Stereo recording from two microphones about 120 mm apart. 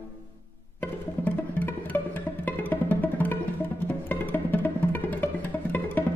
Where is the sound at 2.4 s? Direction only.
15° left (ahead or behind).